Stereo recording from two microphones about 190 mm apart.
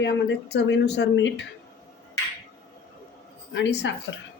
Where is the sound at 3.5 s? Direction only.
70° left (ahead or behind).